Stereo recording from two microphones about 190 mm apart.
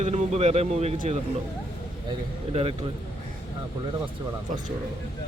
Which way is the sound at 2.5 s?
30° right (ahead or behind).